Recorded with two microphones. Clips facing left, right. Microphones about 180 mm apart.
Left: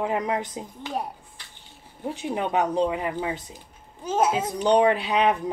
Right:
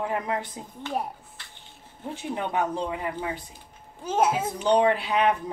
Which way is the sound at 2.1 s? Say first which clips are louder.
Left 3 dB; 15° left (ahead or behind).